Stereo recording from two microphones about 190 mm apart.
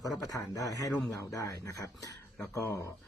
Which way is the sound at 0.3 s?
15° left (ahead or behind).